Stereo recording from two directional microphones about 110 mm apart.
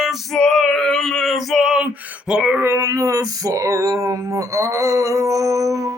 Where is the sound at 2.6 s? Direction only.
25° right (ahead or behind).